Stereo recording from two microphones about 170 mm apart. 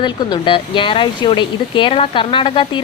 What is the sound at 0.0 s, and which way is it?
A woman's voice, 25° left (ahead or behind).